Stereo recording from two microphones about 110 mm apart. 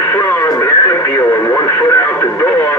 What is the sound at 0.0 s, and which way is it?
Radio, 20° left (ahead or behind).